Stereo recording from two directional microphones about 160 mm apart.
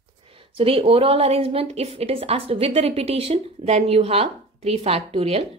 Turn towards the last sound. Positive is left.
turn(degrees=-40)  # may be behind; listen again after turning